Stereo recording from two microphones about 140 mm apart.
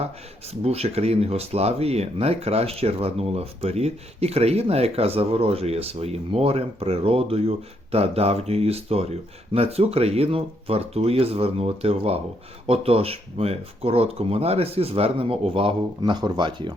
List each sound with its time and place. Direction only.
0.6 s speech: 45° right (ahead or behind)